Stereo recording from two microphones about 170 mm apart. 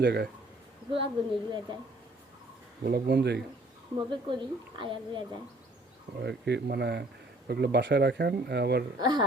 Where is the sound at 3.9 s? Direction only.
30° right (ahead or behind).